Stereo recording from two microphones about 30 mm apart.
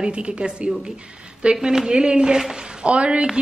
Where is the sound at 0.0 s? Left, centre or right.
Right.